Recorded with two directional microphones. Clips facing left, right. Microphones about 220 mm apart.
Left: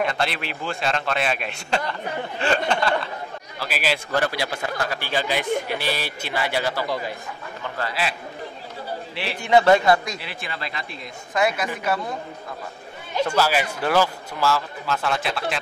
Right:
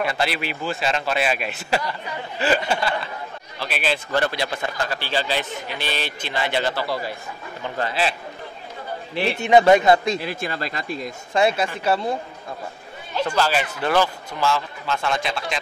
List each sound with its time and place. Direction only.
0.0 s a man's voice: 5° right (ahead or behind)
3.5 s a man's voice: 5° left (ahead or behind)
7.6 s a man's voice: 20° right (ahead or behind)
9.4 s a man's voice: 20° right (ahead or behind)
10.2 s speech: 40° right (ahead or behind)
11.3 s a man's voice: 30° right (ahead or behind)
13.3 s a man's voice: 10° left (ahead or behind)